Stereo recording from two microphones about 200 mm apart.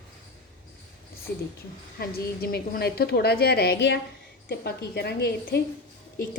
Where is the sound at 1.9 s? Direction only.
50° left (ahead or behind).